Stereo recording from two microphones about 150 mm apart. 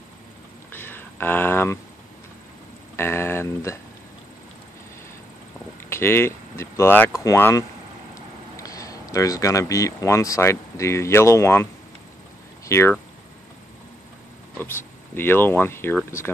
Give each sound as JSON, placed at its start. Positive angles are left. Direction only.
{"t": 0.7, "sound": "a sound", "side_deg": 15}
{"t": 3.0, "sound": "speech", "side_deg": 15}
{"t": 5.9, "sound": "speech", "side_deg": 15}
{"t": 14.6, "sound": "speech", "side_deg": 15}